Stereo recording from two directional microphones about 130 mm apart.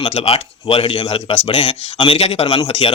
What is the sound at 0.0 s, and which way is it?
Speech, 50° left (ahead or behind).